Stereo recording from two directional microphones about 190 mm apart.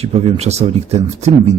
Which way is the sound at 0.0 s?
30° right (ahead or behind).